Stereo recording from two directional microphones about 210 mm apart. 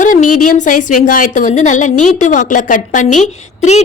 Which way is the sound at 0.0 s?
40° left (ahead or behind).